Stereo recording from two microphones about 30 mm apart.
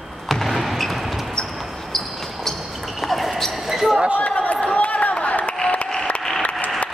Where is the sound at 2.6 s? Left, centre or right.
Centre.